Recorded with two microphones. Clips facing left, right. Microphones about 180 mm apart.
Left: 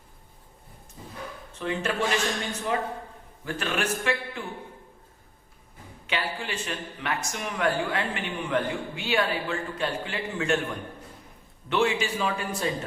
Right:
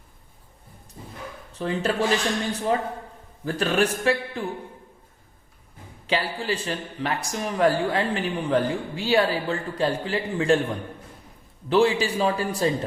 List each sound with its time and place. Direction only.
1.5 s speech: 35° right (ahead or behind)
6.1 s speech: 35° right (ahead or behind)
11.7 s speech: 35° right (ahead or behind)